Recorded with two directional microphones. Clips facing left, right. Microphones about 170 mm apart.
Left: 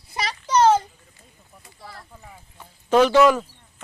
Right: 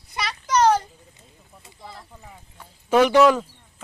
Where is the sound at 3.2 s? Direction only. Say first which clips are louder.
Even; centre (ahead or behind).